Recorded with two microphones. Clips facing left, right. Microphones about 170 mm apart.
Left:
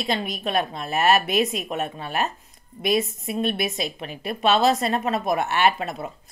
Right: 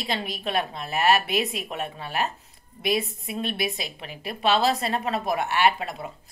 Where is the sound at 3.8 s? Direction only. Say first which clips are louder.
Left 5 dB; 55° left (ahead or behind).